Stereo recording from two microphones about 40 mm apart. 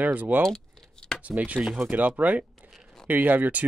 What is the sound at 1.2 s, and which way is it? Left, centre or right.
Speech, right.